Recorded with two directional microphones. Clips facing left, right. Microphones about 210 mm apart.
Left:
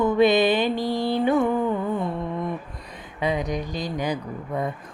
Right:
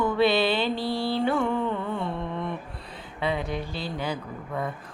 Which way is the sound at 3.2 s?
15° left (ahead or behind).